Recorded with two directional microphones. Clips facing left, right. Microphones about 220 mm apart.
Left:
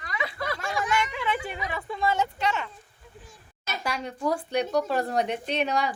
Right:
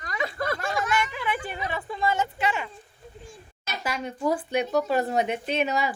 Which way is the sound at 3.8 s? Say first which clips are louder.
Right 2 dB; centre (ahead or behind).